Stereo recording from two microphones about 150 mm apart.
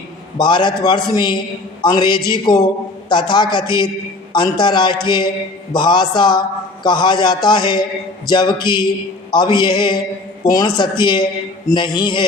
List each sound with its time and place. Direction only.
0.3 s a man's voice: 30° left (ahead or behind)